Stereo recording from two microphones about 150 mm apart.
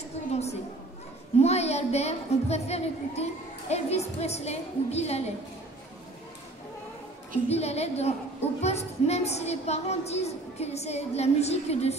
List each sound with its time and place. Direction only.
0.3 s a sound: 45° left (ahead or behind)
1.4 s a woman's voice: 45° left (ahead or behind)
7.4 s a woman's voice: 45° left (ahead or behind)